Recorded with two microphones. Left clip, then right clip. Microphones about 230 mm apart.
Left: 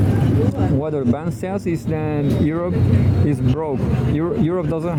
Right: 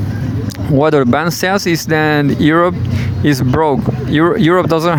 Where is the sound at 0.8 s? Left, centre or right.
Right.